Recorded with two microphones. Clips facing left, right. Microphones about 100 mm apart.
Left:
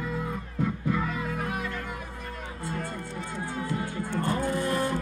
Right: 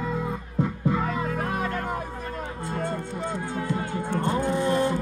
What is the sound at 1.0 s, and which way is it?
Music, 40° right (ahead or behind).